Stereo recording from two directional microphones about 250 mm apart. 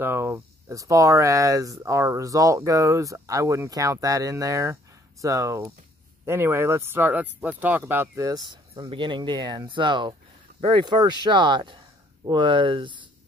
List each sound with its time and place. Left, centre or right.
0.0 s speech: centre